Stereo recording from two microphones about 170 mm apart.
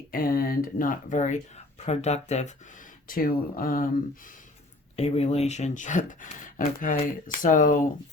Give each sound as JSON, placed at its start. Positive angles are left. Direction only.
{"t": 0.1, "sound": "speech", "side_deg": 60}
{"t": 4.9, "sound": "speech", "side_deg": 35}